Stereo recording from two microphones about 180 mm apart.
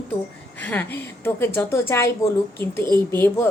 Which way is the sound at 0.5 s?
10° left (ahead or behind).